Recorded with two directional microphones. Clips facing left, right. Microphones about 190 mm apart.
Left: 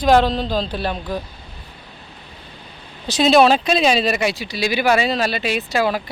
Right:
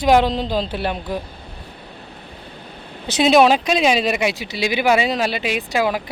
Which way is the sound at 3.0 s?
20° right (ahead or behind).